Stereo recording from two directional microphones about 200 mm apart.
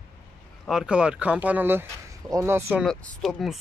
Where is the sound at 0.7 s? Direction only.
5° right (ahead or behind).